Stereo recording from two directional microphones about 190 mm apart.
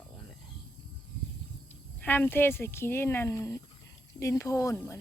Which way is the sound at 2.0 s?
10° left (ahead or behind).